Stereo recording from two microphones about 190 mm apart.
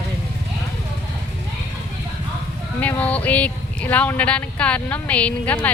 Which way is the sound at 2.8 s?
10° left (ahead or behind).